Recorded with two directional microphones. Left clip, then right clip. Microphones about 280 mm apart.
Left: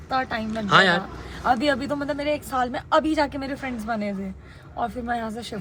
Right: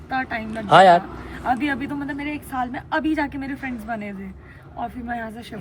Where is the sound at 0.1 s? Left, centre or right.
Centre.